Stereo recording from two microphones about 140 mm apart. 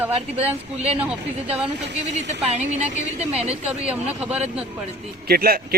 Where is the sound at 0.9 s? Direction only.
10° right (ahead or behind).